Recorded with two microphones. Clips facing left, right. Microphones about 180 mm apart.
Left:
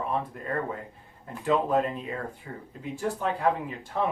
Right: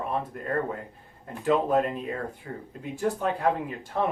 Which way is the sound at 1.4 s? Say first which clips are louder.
Right 1 dB; 50° right (ahead or behind).